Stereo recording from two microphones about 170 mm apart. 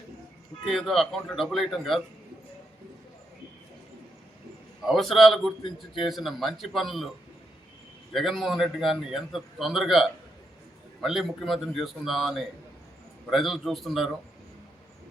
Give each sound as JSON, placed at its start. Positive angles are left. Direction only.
{"t": 0.6, "sound": "a man's voice", "side_deg": 0}
{"t": 4.9, "sound": "a man's voice", "side_deg": 0}
{"t": 5.6, "sound": "speech", "side_deg": 30}
{"t": 6.1, "sound": "a man's voice", "side_deg": 0}
{"t": 8.1, "sound": "a man's voice", "side_deg": 0}